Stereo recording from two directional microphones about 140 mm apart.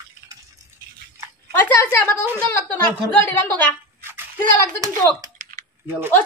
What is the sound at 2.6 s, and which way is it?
A woman's voice, 15° left (ahead or behind).